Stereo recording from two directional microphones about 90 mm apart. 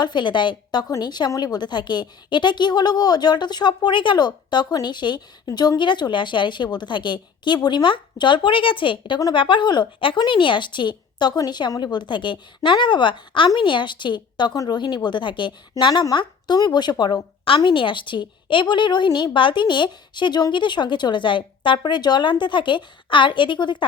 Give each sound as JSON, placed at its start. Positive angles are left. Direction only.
{"t": 0.0, "sound": "a woman's voice", "side_deg": 60}
{"t": 17.6, "sound": "speech", "side_deg": 65}